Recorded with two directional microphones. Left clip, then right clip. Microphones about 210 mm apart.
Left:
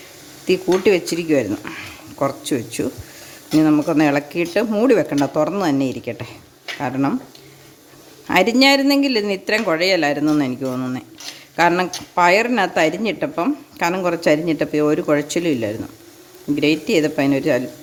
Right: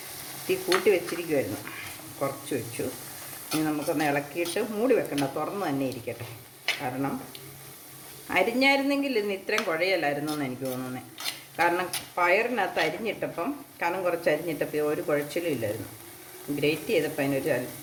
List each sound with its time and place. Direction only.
0.4 s a woman's voice: 60° left (ahead or behind)
8.3 s a woman's voice: 55° left (ahead or behind)